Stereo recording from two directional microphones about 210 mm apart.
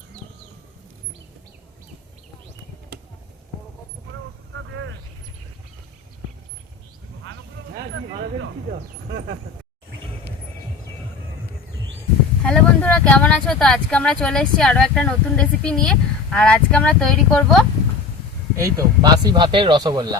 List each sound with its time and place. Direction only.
4.5 s a sound: 65° right (ahead or behind)
12.5 s speech: 5° left (ahead or behind)
18.5 s speech: 15° right (ahead or behind)